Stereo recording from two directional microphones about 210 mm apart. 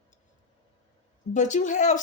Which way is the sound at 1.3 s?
35° left (ahead or behind).